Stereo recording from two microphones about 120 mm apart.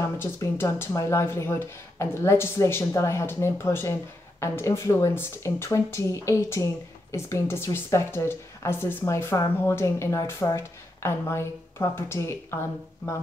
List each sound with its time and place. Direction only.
0.0 s speech: 20° left (ahead or behind)